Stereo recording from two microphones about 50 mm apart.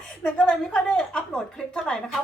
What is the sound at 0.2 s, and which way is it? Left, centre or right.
A woman's voice, centre.